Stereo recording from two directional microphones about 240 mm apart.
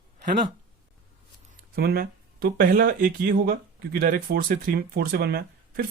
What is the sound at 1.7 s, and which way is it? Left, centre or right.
Speech, right.